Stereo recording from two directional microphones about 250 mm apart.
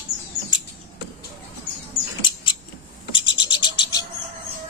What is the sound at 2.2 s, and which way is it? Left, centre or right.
Rodents, centre.